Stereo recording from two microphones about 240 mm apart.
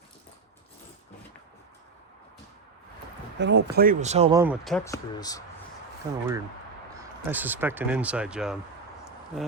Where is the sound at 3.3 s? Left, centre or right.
Right.